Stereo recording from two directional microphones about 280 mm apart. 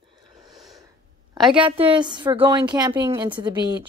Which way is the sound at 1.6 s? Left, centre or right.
Centre.